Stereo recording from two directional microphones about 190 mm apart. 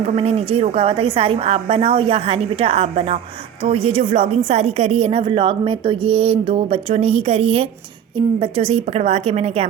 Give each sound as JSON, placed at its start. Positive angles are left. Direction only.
{"t": 0.0, "sound": "a woman's voice", "side_deg": -30}